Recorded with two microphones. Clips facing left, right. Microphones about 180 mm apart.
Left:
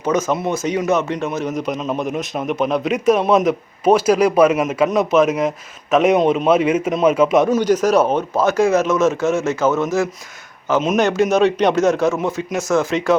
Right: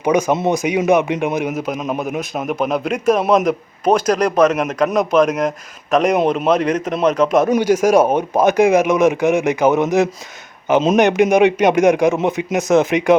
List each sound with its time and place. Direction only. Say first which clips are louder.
0.0 s a man's voice: right 3 dB; 15° right (ahead or behind)
7.5 s a man's voice: right 2 dB; 10° right (ahead or behind)